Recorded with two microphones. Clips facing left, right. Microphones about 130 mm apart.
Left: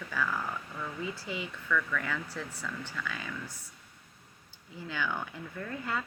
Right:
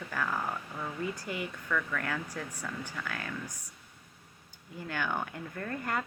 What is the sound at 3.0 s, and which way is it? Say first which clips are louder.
Speech: even; 60° right (ahead or behind).